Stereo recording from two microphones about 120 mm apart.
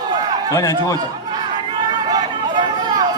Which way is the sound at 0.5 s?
25° left (ahead or behind).